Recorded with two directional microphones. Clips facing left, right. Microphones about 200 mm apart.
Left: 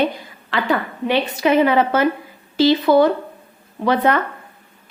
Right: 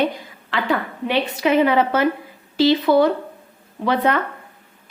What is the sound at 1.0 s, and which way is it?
A woman's voice, 45° left (ahead or behind).